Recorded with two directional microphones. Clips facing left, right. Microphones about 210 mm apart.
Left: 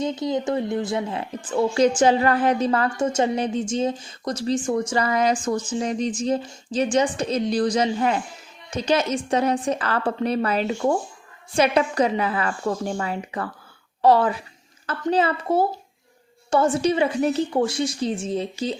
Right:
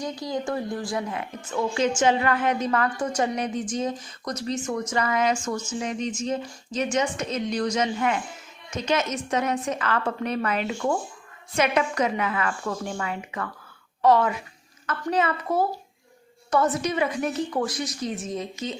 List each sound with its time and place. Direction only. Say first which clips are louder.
0.0 s a woman's voice: left 5 dB; 20° left (ahead or behind)